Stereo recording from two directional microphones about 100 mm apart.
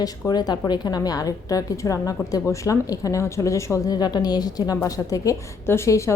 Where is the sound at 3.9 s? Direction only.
45° left (ahead or behind).